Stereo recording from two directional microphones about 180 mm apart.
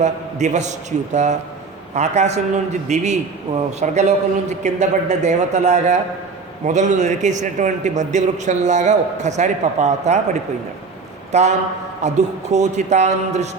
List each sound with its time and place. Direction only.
0.0 s a man's voice: 40° right (ahead or behind)